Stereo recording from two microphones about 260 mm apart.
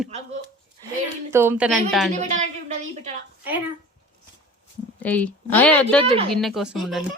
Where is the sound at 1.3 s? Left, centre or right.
Centre.